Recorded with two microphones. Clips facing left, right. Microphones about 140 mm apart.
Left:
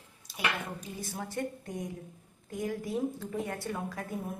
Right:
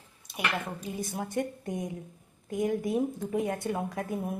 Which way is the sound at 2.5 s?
20° right (ahead or behind).